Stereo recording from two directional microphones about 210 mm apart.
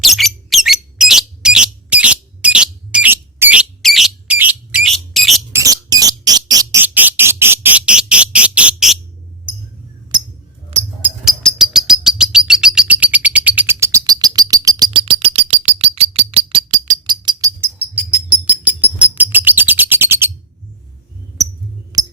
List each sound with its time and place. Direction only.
0.0 s a sound: centre (ahead or behind)
5.5 s bird: 15° right (ahead or behind)
10.7 s cricket: 30° right (ahead or behind)
11.3 s bird: centre (ahead or behind); by 17.0 s 35° right (ahead or behind)
17.1 s a sound: 20° right (ahead or behind)
21.9 s music: 15° right (ahead or behind)